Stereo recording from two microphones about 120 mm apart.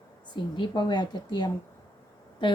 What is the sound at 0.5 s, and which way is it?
Speech, 40° left (ahead or behind).